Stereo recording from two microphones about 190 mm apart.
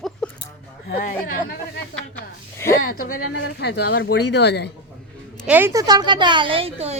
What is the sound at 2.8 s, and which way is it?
Speech, 50° left (ahead or behind).